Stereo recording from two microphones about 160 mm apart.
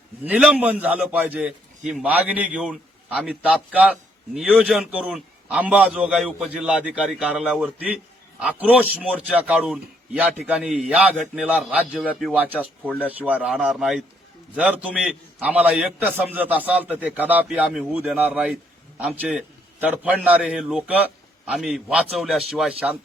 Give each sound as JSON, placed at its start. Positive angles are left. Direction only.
{"t": 0.3, "sound": "a man's voice", "side_deg": -5}